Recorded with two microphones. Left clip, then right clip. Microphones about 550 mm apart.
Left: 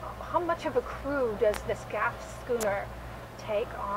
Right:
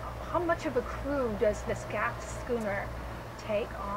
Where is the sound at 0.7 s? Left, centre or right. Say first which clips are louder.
Left 2 dB; centre.